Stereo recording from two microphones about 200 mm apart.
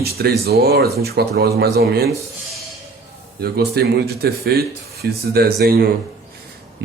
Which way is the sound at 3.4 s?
50° right (ahead or behind).